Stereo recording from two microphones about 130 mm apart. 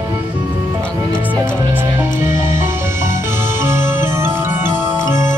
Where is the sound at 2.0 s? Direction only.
75° left (ahead or behind).